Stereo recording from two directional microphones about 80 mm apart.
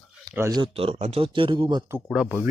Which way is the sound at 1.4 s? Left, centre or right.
Right.